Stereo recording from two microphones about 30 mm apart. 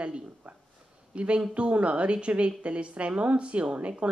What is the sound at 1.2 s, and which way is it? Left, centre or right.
Speech, right.